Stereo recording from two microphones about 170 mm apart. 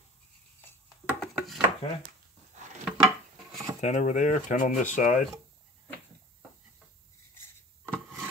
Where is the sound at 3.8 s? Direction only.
45° left (ahead or behind).